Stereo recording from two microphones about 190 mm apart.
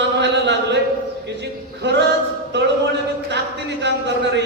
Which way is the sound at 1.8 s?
70° right (ahead or behind).